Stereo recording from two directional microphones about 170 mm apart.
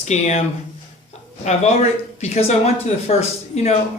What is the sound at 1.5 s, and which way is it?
Speech, 40° left (ahead or behind).